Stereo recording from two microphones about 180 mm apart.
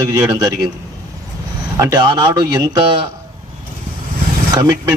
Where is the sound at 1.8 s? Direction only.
20° right (ahead or behind).